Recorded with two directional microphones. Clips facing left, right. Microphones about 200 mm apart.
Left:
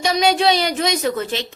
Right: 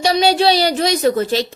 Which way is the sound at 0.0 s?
35° right (ahead or behind).